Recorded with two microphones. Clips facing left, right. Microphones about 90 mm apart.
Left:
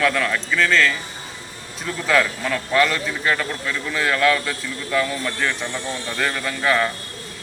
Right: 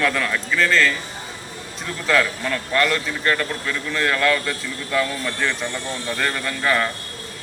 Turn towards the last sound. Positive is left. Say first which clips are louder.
# left 1 dB
turn(degrees=5)  # may be behind; listen again after turning